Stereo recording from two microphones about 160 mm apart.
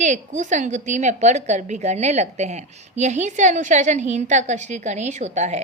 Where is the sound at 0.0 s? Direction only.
50° right (ahead or behind).